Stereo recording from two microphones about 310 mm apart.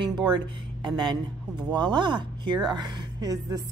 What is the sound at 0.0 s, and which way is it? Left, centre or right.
Music, centre.